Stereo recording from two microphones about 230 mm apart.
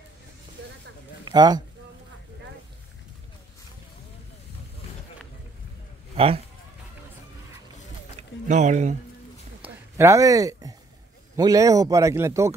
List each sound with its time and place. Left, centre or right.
1.2 s speech: centre
6.1 s speech: right
8.2 s speech: right
9.6 s a sound: centre
11.3 s speech: centre